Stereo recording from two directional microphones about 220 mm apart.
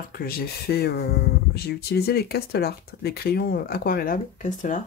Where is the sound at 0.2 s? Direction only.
45° left (ahead or behind).